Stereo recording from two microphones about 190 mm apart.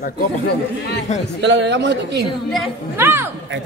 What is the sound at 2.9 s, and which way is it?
Speech, 10° right (ahead or behind).